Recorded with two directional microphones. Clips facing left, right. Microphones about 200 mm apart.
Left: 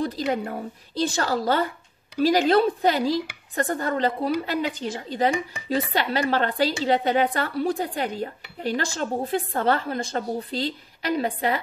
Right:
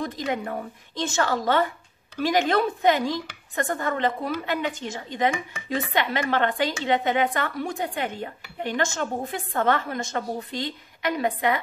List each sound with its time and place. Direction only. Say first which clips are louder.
0.0 s a woman's voice: left 3 dB; 30° left (ahead or behind)